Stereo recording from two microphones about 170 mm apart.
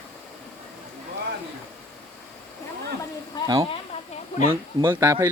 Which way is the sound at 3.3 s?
25° left (ahead or behind).